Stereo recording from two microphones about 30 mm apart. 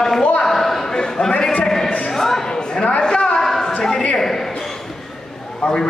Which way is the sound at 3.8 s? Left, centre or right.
Centre.